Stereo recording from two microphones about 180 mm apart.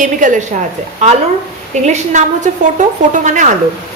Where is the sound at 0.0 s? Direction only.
45° right (ahead or behind).